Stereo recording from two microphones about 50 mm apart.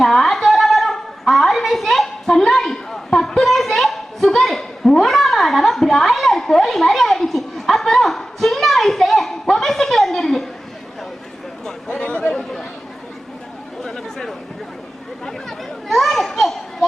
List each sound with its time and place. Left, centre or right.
0.0 s a sound: centre
11.9 s chatter: left
12.3 s chatter: centre
13.8 s chatter: centre
15.3 s children playing: centre